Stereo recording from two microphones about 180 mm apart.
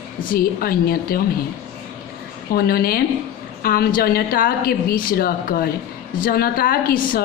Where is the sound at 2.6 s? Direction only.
60° left (ahead or behind).